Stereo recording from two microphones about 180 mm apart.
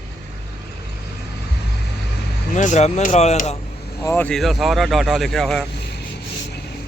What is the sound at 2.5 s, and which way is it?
Speech, 40° left (ahead or behind).